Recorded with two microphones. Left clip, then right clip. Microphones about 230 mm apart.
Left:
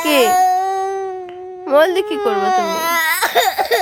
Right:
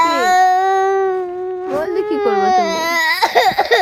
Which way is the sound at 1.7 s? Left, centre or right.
Left.